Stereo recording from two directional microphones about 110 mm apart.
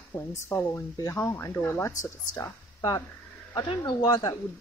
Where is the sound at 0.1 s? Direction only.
25° left (ahead or behind).